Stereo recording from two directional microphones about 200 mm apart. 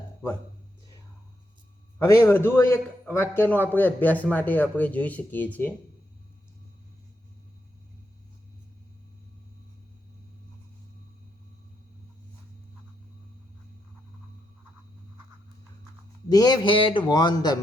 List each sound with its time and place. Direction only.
2.0 s a man's voice: 10° left (ahead or behind)
16.3 s a man's voice: 20° left (ahead or behind)